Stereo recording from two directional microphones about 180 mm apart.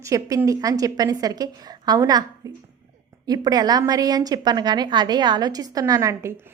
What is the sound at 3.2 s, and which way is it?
A woman's voice, 20° right (ahead or behind).